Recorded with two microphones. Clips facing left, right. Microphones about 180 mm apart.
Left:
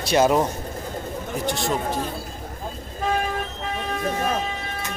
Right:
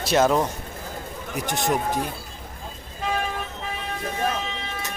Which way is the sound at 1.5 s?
20° right (ahead or behind).